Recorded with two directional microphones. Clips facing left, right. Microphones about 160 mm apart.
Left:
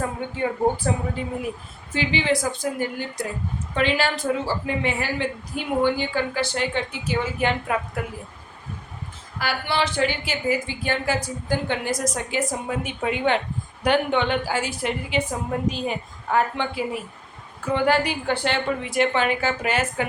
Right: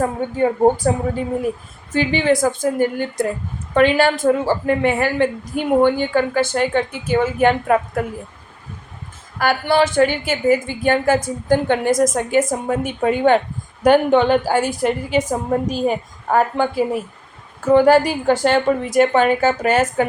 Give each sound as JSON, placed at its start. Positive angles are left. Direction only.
{"t": 0.2, "sound": "a woman's voice", "side_deg": -45}
{"t": 9.4, "sound": "a woman's voice", "side_deg": -50}